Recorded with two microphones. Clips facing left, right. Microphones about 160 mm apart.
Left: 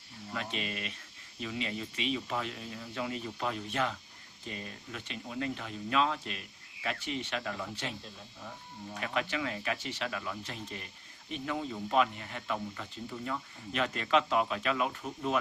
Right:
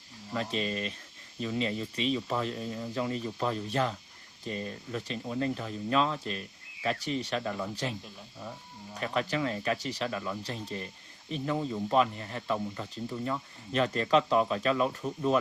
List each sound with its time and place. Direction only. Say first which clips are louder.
0.3 s speech: right 6 dB; 35° right (ahead or behind)
9.0 s speech: right 4 dB; 35° right (ahead or behind)